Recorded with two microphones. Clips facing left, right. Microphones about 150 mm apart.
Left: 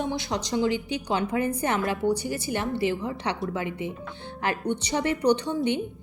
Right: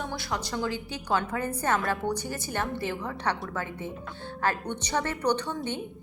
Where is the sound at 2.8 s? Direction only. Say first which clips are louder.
Left 4 dB; 55° right (ahead or behind).